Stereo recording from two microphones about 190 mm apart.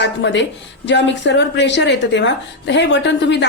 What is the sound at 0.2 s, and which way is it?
A woman's voice, 70° left (ahead or behind).